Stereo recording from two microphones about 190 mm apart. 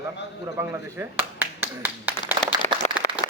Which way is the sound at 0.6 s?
10° right (ahead or behind).